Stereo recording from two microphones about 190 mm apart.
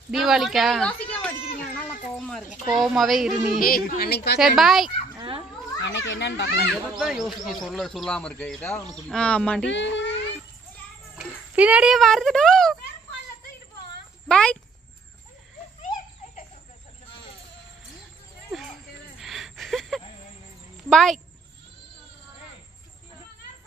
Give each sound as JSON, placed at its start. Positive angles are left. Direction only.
{"t": 0.1, "sound": "speech", "side_deg": 0}
{"t": 1.8, "sound": "a sound", "side_deg": 5}
{"t": 2.7, "sound": "speech", "side_deg": 0}
{"t": 3.5, "sound": "a woman's voice", "side_deg": 50}
{"t": 4.4, "sound": "speech", "side_deg": 0}
{"t": 5.9, "sound": "a child's voice", "side_deg": 75}
{"t": 7.0, "sound": "speech", "side_deg": 0}
{"t": 9.7, "sound": "a child's voice", "side_deg": 70}
{"t": 11.1, "sound": "speech", "side_deg": -5}
{"t": 14.2, "sound": "speech", "side_deg": 5}
{"t": 18.5, "sound": "a sound", "side_deg": 0}
{"t": 20.9, "sound": "speech", "side_deg": 5}